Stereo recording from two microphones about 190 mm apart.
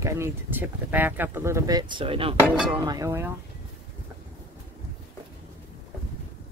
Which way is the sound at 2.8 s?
15° right (ahead or behind).